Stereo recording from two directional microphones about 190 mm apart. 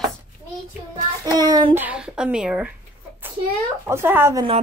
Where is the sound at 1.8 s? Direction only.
5° right (ahead or behind).